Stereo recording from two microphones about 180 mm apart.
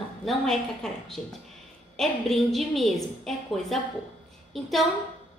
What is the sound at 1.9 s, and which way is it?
A woman's voice, centre (ahead or behind).